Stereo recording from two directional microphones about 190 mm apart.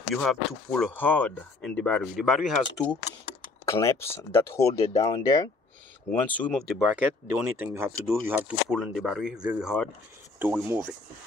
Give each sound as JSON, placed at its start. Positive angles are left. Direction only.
{"t": 0.1, "sound": "speech", "side_deg": 0}
{"t": 3.6, "sound": "speech", "side_deg": 15}
{"t": 6.9, "sound": "speech", "side_deg": -10}